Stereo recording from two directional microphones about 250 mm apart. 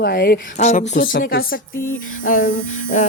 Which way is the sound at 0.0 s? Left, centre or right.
Left.